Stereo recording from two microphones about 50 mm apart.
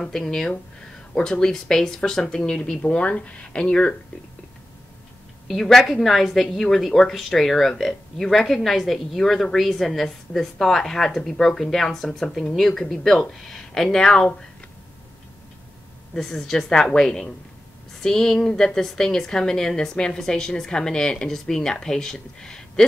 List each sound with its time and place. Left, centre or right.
0.0 s a woman's voice: centre
5.5 s a woman's voice: centre
13.8 s a woman's voice: centre
16.2 s a woman's voice: centre